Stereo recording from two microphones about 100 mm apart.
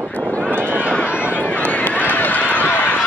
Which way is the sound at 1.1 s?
15° right (ahead or behind).